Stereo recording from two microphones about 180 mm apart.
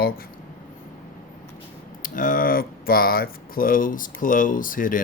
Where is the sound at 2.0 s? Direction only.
50° left (ahead or behind).